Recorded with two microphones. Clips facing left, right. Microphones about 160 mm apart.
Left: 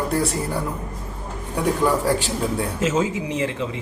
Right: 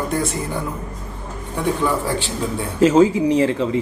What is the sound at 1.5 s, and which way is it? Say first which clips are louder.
Speech: even; 10° left (ahead or behind).